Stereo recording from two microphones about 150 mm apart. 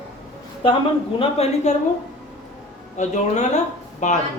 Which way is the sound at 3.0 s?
50° left (ahead or behind).